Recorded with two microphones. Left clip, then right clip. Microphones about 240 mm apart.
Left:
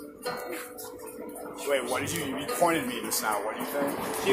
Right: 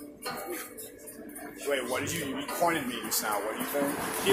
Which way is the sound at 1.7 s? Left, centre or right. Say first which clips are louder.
Left 2 dB; centre.